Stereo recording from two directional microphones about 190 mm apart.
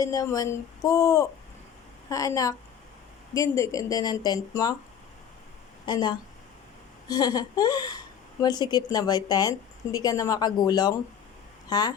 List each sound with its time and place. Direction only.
0.0 s a woman's voice: 15° left (ahead or behind)
5.8 s a woman's voice: 20° left (ahead or behind)